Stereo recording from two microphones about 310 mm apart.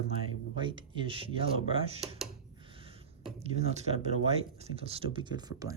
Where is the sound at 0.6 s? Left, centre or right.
Centre.